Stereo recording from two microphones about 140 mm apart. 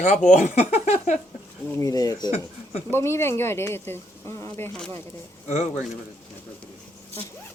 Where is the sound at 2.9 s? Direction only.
20° left (ahead or behind).